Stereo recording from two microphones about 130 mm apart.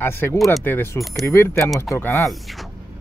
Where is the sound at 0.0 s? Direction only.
15° left (ahead or behind).